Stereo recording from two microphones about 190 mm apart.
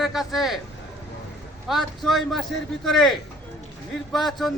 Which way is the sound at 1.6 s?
Centre (ahead or behind).